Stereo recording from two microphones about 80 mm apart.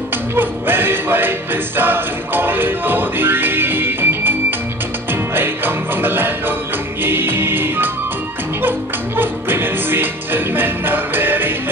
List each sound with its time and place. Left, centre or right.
0.4 s music: right